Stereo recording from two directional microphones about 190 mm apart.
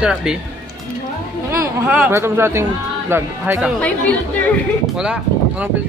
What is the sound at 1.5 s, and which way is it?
Speech, 15° right (ahead or behind).